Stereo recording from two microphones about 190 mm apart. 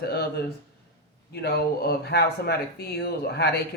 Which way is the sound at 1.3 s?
55° left (ahead or behind).